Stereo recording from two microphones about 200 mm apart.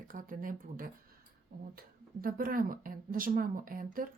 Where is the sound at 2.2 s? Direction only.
45° right (ahead or behind).